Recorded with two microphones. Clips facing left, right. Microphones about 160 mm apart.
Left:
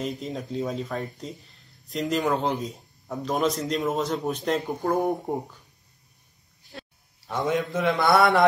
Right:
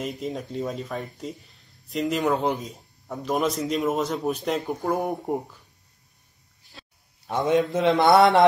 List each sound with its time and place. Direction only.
0.0 s speech: centre (ahead or behind)
7.2 s a man's voice: 20° right (ahead or behind)